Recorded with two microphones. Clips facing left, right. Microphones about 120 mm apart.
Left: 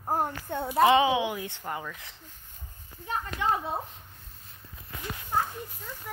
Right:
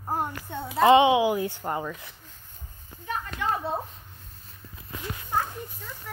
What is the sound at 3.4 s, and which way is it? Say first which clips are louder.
Speech: left 1 dB; 25° left (ahead or behind).